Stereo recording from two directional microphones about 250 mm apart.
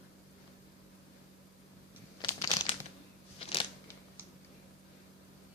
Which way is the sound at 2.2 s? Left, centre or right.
Centre.